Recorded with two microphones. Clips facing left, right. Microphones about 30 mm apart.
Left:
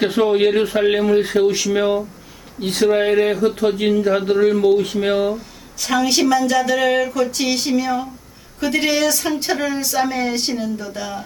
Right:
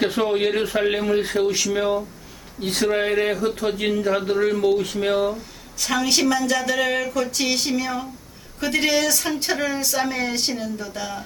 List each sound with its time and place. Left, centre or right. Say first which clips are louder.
0.0 s speech: left 5 dB; centre
2.6 s speech: left 5 dB; centre
5.8 s speech: left 3 dB; centre